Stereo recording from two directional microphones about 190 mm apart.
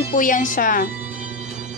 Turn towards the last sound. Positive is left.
turn(degrees=45)  # may be behind; listen again after turning